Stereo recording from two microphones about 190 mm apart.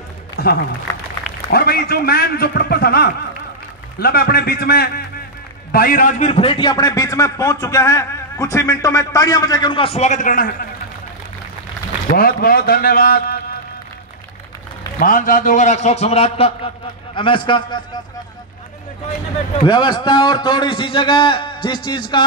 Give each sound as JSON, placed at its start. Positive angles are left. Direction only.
{"t": 0.4, "sound": "a man's voice", "side_deg": 55}
{"t": 12.1, "sound": "a man's voice", "side_deg": 50}
{"t": 15.0, "sound": "a man's voice", "side_deg": 50}
{"t": 19.6, "sound": "a man's voice", "side_deg": 25}